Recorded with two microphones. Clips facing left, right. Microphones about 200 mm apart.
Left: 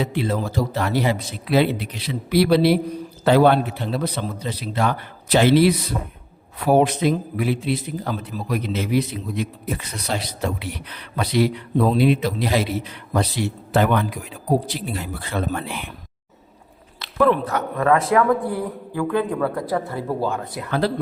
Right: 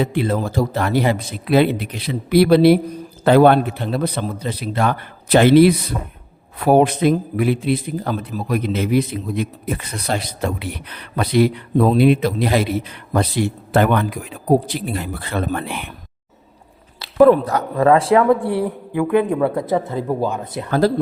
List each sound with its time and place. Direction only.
0.0 s a man's voice: 55° right (ahead or behind)
17.0 s speech: 35° right (ahead or behind)
20.7 s speech: 40° right (ahead or behind)